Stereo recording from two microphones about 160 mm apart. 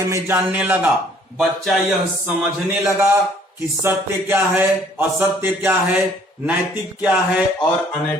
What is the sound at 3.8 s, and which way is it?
Speech, 15° right (ahead or behind).